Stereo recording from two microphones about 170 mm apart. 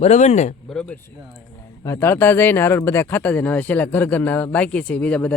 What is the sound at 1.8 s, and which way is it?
Speech, 15° left (ahead or behind).